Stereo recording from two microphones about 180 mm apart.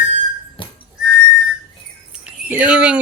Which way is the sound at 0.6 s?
25° left (ahead or behind).